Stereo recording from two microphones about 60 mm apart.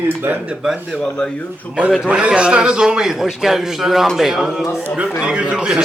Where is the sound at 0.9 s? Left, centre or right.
Centre.